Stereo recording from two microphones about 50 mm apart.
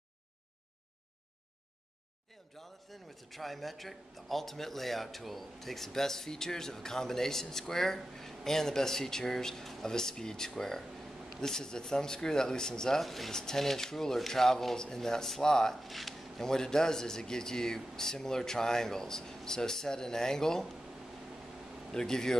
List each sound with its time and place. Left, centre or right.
2.6 s a man's voice: centre
15.8 s speech: centre
16.4 s a man's voice: centre
21.9 s a man's voice: centre